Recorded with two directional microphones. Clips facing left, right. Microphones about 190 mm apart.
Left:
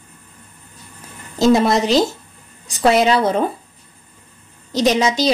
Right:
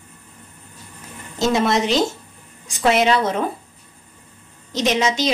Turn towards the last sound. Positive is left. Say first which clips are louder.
# left 3 dB
turn(degrees=35)  # may be behind; listen again after turning